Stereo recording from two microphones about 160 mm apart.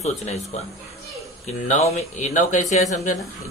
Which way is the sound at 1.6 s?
45° left (ahead or behind).